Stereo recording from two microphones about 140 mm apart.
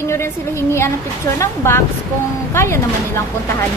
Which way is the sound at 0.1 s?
20° left (ahead or behind).